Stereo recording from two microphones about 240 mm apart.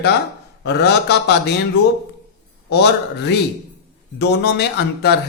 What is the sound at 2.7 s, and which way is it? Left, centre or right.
A man's voice, left.